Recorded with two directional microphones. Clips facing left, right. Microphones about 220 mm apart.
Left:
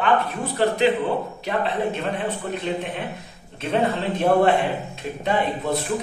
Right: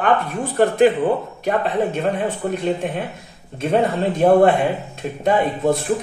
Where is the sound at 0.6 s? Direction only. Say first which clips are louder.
Right 4 dB; 50° right (ahead or behind).